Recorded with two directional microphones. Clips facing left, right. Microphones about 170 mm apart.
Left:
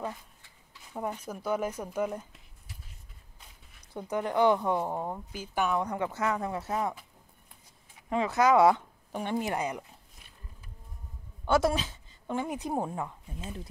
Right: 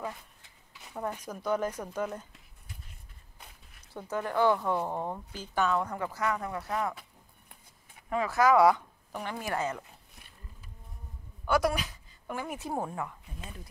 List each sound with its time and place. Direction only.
1.2 s a woman's voice: 10° left (ahead or behind)
3.9 s a woman's voice: 15° left (ahead or behind)
8.1 s a woman's voice: 20° left (ahead or behind)
11.4 s a woman's voice: 25° left (ahead or behind)